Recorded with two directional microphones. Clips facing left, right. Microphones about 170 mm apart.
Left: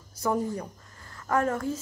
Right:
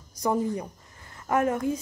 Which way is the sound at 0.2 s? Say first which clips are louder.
Right 2 dB; 15° right (ahead or behind).